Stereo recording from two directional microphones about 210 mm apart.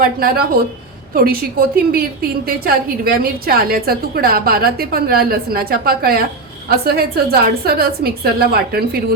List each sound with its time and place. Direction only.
0.0 s a woman's voice: 45° right (ahead or behind)